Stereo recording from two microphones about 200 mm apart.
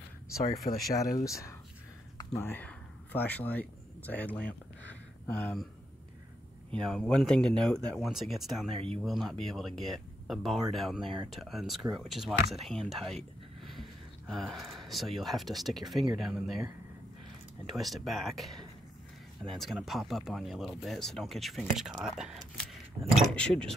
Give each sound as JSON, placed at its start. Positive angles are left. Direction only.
{"t": 0.8, "sound": "speech", "side_deg": 15}
{"t": 2.1, "sound": "a sound", "side_deg": 10}
{"t": 6.8, "sound": "speech", "side_deg": 5}
{"t": 17.7, "sound": "speech", "side_deg": 0}